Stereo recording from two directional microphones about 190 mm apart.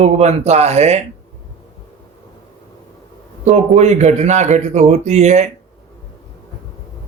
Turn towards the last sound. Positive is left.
turn(degrees=-35)  # may be behind; listen again after turning